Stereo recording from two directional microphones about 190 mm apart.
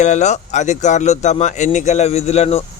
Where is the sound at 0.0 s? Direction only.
40° left (ahead or behind).